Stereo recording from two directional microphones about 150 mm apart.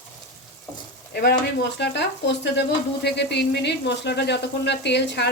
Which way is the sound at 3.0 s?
90° left.